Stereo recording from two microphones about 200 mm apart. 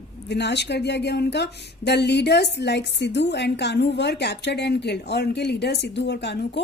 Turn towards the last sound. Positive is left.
turn(degrees=55)  # may be behind; listen again after turning